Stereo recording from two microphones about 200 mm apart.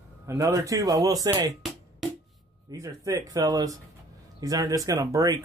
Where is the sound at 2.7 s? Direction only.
15° right (ahead or behind).